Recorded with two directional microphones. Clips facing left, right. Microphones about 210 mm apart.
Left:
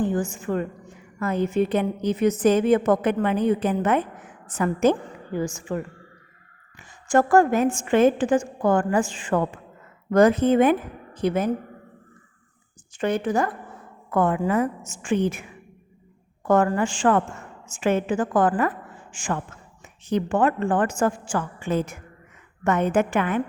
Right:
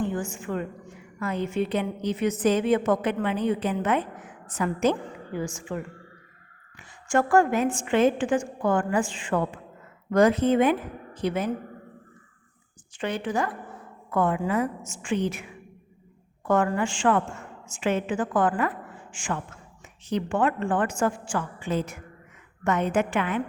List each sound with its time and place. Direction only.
0.0 s a sound: 40° left (ahead or behind)
0.3 s a woman's voice: 40° left (ahead or behind)
7.1 s a woman's voice: 40° left (ahead or behind)
13.0 s a woman's voice: 45° left (ahead or behind)
16.5 s a woman's voice: 40° left (ahead or behind)